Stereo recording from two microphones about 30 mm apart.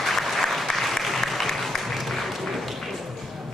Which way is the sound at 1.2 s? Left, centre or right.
Centre.